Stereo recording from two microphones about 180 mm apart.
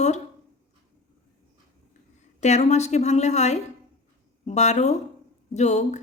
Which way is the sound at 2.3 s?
40° left (ahead or behind).